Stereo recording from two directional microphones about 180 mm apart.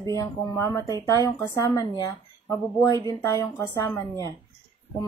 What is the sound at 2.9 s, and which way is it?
Speech, 25° right (ahead or behind).